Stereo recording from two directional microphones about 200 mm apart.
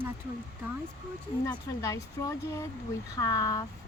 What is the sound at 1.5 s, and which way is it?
Speech, 20° left (ahead or behind).